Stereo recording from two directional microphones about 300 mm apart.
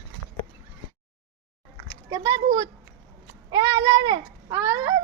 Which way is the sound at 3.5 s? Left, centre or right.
Centre.